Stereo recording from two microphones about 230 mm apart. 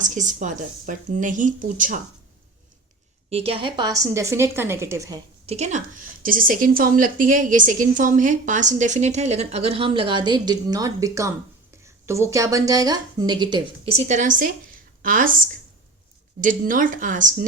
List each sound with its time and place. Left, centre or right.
0.0 s a woman's voice: right
3.2 s a woman's voice: right
5.5 s a woman's voice: right
16.4 s a woman's voice: right